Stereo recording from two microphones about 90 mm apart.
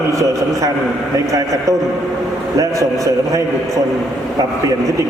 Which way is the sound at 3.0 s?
40° right (ahead or behind).